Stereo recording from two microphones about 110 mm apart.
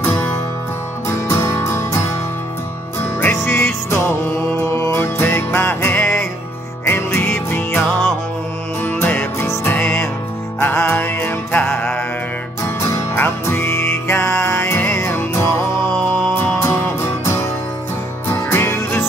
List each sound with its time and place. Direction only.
0.0 s music: 20° left (ahead or behind)